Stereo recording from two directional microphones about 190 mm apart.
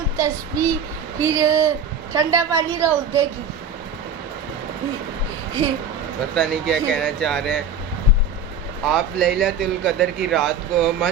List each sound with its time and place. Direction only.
0.2 s child singing: 15° right (ahead or behind)
6.3 s speech: centre (ahead or behind)
8.8 s speech: centre (ahead or behind)